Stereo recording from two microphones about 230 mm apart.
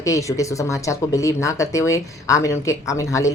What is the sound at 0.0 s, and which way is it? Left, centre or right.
A woman's voice, centre.